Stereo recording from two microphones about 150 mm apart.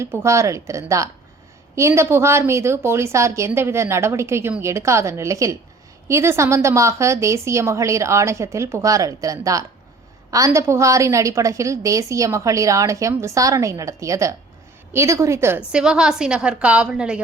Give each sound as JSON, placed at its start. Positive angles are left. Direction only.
{"t": 0.0, "sound": "a woman's voice", "side_deg": -15}